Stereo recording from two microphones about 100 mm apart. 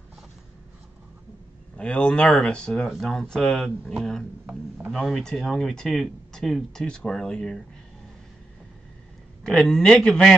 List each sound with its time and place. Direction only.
1.8 s speech: 10° left (ahead or behind)
4.5 s speech: 15° right (ahead or behind)
4.9 s speech: 5° left (ahead or behind)
9.4 s speech: 5° left (ahead or behind)